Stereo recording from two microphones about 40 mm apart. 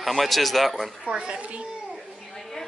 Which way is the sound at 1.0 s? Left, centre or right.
Right.